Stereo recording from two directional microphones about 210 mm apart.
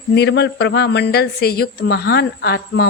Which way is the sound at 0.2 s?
55° left (ahead or behind).